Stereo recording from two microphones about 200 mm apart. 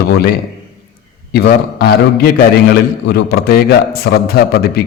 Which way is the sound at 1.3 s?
50° left (ahead or behind).